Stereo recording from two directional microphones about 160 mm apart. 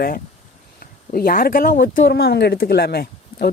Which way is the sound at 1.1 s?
60° left (ahead or behind).